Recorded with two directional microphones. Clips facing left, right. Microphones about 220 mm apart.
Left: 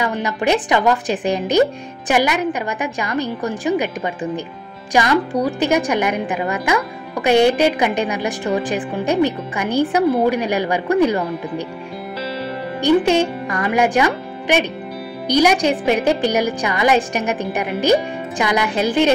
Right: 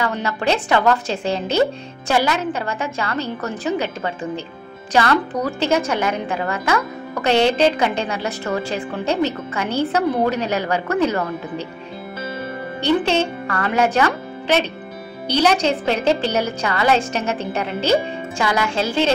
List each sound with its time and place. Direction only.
0.0 s a woman's voice: 15° left (ahead or behind)
12.8 s a woman's voice: 15° left (ahead or behind)